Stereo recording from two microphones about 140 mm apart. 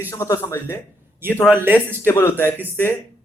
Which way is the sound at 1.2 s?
15° right (ahead or behind).